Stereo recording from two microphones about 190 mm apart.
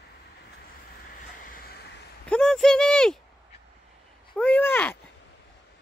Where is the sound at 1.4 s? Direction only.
50° left (ahead or behind).